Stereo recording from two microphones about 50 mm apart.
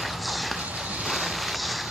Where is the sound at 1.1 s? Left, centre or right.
Centre.